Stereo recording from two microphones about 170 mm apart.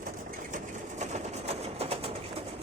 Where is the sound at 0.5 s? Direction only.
45° right (ahead or behind).